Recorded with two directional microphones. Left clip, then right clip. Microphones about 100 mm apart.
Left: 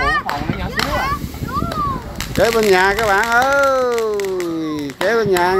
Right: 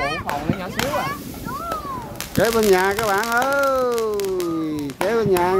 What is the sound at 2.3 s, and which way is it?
Speech, 15° right (ahead or behind).